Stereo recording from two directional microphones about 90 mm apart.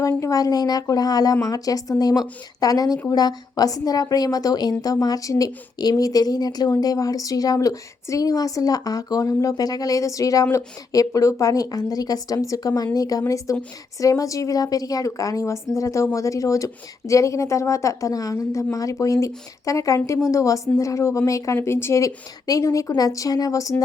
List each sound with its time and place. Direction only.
0.2 s a woman's voice: 40° left (ahead or behind)